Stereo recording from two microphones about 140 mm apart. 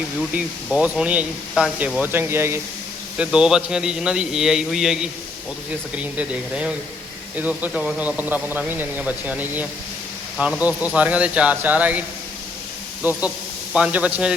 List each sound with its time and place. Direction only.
0.3 s speech: 5° right (ahead or behind)
2.0 s speech: 15° right (ahead or behind)
3.2 s a man's voice: 5° right (ahead or behind)